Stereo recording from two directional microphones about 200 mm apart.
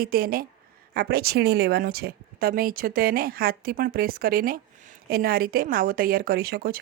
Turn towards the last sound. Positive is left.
turn(degrees=-50)  # may be behind; listen again after turning